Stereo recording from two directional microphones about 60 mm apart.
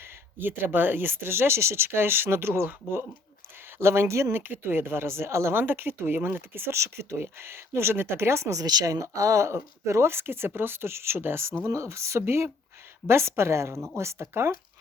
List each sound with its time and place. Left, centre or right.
0.3 s speech: right
3.8 s speech: right
5.5 s speech: right
8.5 s speech: right
11.6 s speech: right